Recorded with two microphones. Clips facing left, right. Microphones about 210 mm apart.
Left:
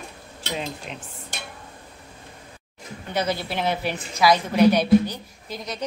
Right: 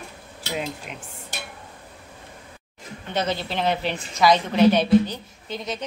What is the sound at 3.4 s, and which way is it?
A woman's voice, 10° left (ahead or behind).